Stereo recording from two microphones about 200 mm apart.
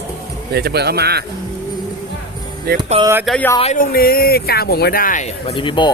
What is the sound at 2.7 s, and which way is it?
Speech, 50° right (ahead or behind).